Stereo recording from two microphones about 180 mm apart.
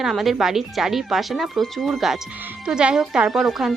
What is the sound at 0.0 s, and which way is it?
Speech, centre (ahead or behind).